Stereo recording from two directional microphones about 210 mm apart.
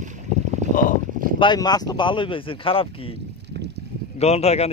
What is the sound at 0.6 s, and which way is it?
Boat, 35° right (ahead or behind).